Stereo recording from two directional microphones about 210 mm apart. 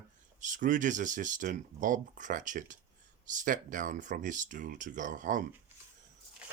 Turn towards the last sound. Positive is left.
turn(degrees=-40)  # may be behind; listen again after turning